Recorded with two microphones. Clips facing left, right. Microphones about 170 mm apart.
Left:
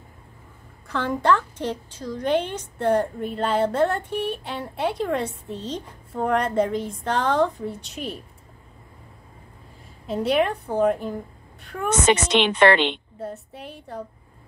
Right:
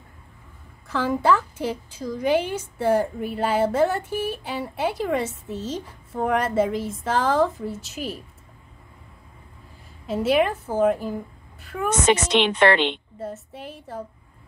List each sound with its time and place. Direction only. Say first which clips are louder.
0.8 s a woman's voice: right 1 dB; centre (ahead or behind)
10.0 s a woman's voice: right 1 dB; centre (ahead or behind)
12.4 s a woman's voice: left 2 dB; 80° left
13.2 s a woman's voice: right 1 dB; centre (ahead or behind)